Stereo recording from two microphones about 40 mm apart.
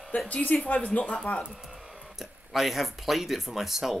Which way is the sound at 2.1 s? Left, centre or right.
Centre.